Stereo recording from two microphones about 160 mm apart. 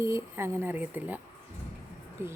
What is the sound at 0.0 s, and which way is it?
Speech, 15° right (ahead or behind).